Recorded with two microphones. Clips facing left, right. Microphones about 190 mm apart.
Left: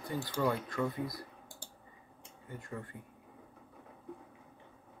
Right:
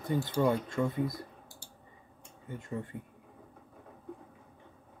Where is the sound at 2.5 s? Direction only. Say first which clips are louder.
Right 5 dB; 25° right (ahead or behind).